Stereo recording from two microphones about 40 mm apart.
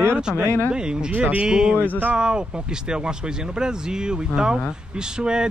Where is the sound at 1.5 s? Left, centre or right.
Centre.